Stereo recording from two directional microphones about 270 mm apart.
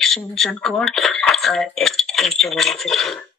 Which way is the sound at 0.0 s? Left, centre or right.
Centre.